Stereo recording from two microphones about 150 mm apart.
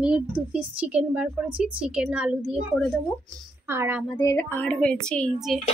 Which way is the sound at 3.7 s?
15° right (ahead or behind).